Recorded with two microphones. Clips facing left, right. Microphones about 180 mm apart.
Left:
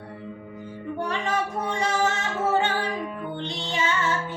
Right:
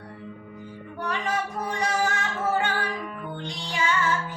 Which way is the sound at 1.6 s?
25° left (ahead or behind).